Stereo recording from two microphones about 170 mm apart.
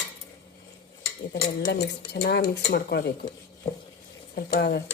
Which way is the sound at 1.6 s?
85° left.